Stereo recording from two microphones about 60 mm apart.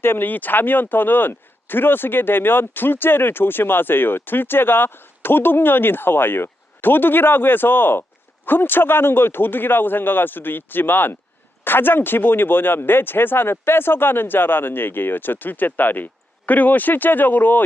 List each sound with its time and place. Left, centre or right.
0.0 s speech: left